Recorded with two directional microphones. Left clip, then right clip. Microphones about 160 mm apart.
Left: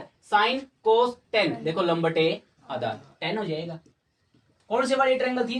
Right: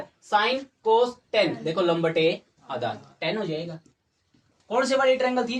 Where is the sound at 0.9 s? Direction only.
10° left (ahead or behind).